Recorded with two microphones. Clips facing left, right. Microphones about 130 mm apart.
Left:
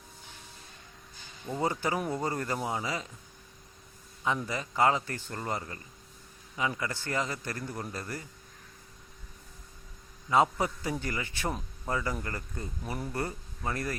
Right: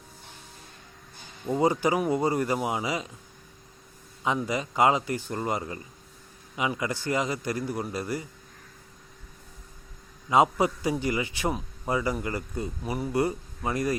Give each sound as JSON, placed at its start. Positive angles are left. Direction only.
{"t": 1.5, "sound": "a man's voice", "side_deg": -20}
{"t": 4.2, "sound": "a man's voice", "side_deg": -15}
{"t": 10.2, "sound": "a man's voice", "side_deg": -15}